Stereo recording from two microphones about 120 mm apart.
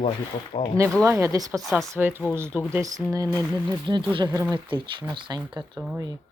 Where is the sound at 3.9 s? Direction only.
45° right (ahead or behind).